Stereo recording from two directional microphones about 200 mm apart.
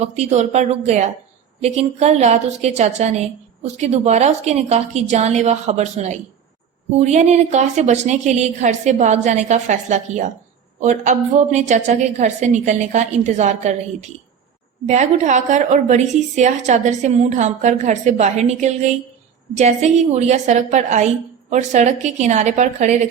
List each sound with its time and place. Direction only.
0.0 s a woman's voice: 35° right (ahead or behind)